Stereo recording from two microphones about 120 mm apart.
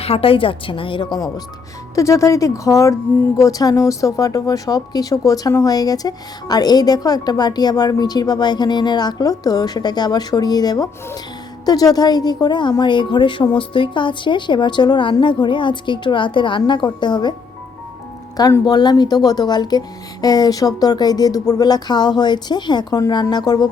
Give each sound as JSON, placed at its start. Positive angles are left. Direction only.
{"t": 0.0, "sound": "a woman's voice", "side_deg": 50}
{"t": 2.0, "sound": "speech", "side_deg": 25}
{"t": 18.3, "sound": "speech", "side_deg": 30}